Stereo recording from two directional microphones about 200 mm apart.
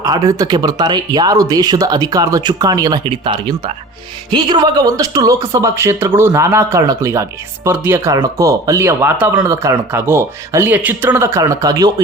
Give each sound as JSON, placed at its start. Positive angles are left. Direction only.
{"t": 0.0, "sound": "speech", "side_deg": -20}